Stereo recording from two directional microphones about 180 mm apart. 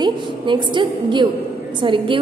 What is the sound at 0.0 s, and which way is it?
A woman's voice, 25° right (ahead or behind).